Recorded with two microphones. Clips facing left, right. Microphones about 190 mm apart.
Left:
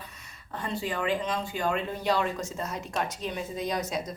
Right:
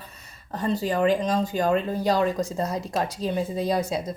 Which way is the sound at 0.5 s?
40° right (ahead or behind).